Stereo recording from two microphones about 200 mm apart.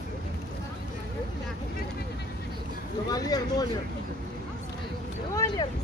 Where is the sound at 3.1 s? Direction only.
20° left (ahead or behind).